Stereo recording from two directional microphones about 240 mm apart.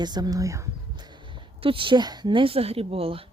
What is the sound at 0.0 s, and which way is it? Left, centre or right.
Speech, centre.